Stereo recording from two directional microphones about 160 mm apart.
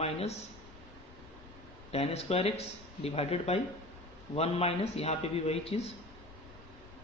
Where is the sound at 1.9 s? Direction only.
40° left (ahead or behind).